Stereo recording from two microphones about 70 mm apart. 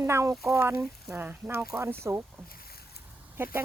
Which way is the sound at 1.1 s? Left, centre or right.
Right.